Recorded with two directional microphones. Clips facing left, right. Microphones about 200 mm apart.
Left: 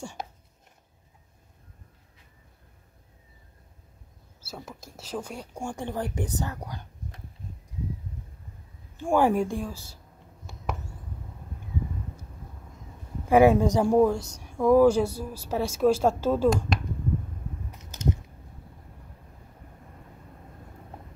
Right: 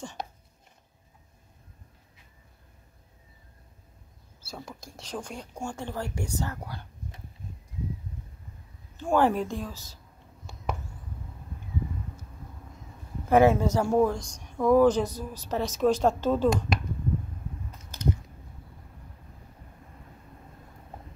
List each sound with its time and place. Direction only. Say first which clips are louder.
0.0 s speech: even; 10° left (ahead or behind)
4.5 s speech: even; 5° left (ahead or behind)
8.9 s speech: left 1 dB; 15° left (ahead or behind)
13.3 s speech: left 2 dB; 15° left (ahead or behind)
17.6 s a sound: left 1 dB; 20° left (ahead or behind)